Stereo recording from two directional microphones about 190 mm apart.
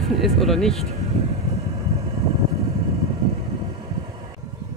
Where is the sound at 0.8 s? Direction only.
35° right (ahead or behind).